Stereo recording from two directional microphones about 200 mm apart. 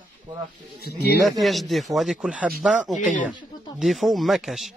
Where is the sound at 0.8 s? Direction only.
55° left (ahead or behind).